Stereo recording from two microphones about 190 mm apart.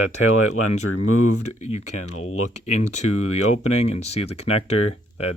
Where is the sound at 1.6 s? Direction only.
35° left (ahead or behind).